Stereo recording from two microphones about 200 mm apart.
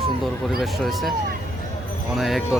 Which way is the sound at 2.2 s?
Centre (ahead or behind).